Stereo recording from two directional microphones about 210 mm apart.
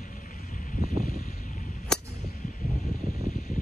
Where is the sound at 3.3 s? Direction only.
35° left (ahead or behind).